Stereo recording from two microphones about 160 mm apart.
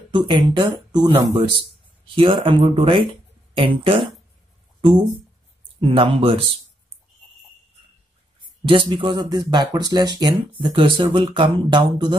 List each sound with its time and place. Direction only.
0.1 s speech: 30° right (ahead or behind)
5.8 s speech: 35° right (ahead or behind)
8.6 s speech: 30° right (ahead or behind)